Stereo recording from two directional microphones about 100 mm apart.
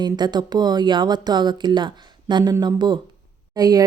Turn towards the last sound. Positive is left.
turn(degrees=-40)  # may be behind; listen again after turning